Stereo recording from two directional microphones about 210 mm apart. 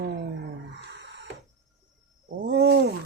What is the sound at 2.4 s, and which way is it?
Roaring cats, 55° right (ahead or behind).